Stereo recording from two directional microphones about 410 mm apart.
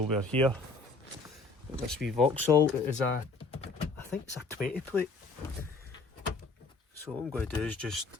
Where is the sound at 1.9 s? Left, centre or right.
Centre.